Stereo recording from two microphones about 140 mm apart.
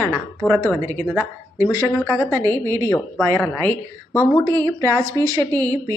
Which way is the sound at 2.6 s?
20° right (ahead or behind).